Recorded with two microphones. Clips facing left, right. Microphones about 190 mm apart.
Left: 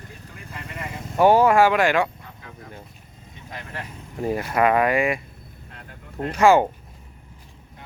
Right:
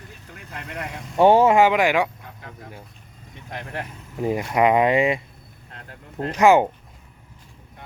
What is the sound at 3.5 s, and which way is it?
Speech, 60° right (ahead or behind).